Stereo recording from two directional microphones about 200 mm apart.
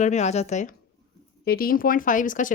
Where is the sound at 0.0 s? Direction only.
35° left (ahead or behind).